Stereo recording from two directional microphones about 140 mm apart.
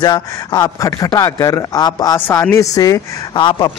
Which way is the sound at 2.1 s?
15° left (ahead or behind).